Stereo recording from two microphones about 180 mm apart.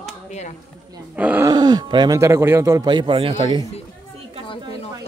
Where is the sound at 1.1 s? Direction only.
10° right (ahead or behind).